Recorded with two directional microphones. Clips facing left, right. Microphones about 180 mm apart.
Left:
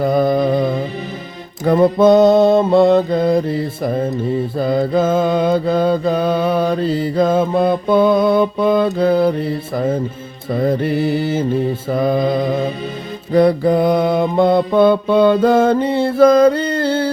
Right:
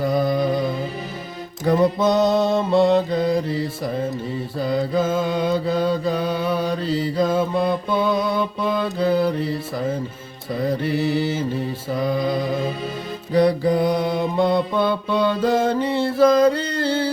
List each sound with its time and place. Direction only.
0.0 s music: 55° left (ahead or behind)
1.6 s mantra: 55° left (ahead or behind)
10.7 s mantra: 55° left (ahead or behind)
13.3 s mantra: 55° left (ahead or behind)